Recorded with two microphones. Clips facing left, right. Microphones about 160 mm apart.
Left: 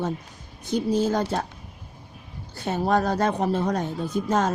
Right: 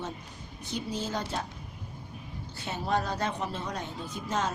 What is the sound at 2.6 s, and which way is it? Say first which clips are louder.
Speech: left 8 dB; 50° left (ahead or behind).